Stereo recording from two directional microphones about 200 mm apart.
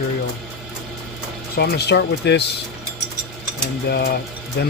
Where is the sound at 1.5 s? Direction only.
55° left (ahead or behind).